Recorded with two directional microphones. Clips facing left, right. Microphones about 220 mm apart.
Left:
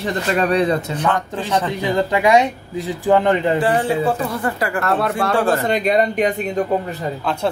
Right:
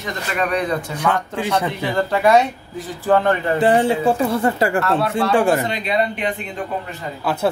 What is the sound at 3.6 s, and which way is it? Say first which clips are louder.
Speech: right 2 dB; 25° right (ahead or behind).